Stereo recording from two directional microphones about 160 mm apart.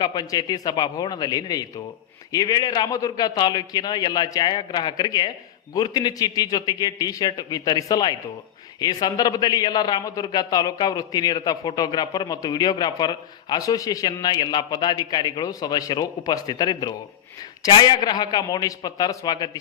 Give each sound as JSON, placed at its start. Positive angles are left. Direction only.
{"t": 0.0, "sound": "a man's voice", "side_deg": 25}